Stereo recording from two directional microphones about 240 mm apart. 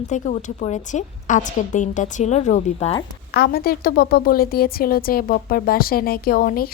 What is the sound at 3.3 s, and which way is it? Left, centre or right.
A woman's voice, left.